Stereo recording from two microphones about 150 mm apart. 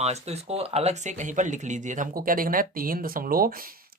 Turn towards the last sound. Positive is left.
turn(degrees=-75)  # may be behind; listen again after turning